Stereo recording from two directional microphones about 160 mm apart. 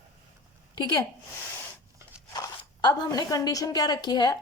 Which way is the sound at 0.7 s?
25° left (ahead or behind).